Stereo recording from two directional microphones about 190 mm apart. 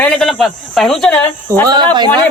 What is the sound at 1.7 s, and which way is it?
Speech, 25° right (ahead or behind).